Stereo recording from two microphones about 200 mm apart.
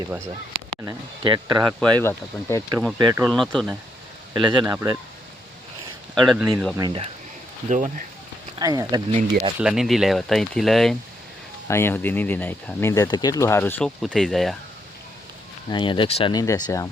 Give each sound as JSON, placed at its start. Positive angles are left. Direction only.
{"t": 1.2, "sound": "speech", "side_deg": -20}
{"t": 1.8, "sound": "speech", "side_deg": 10}
{"t": 3.0, "sound": "speech", "side_deg": -20}
{"t": 3.2, "sound": "speech", "side_deg": 0}
{"t": 4.4, "sound": "speech", "side_deg": -25}
{"t": 6.2, "sound": "speech", "side_deg": -5}
{"t": 6.7, "sound": "speech", "side_deg": -25}
{"t": 7.7, "sound": "speech", "side_deg": -40}
{"t": 8.5, "sound": "speech", "side_deg": -20}
{"t": 9.1, "sound": "speech", "side_deg": -35}
{"t": 9.6, "sound": "speech", "side_deg": -5}
{"t": 11.7, "sound": "speech", "side_deg": 10}
{"t": 15.7, "sound": "speech", "side_deg": 25}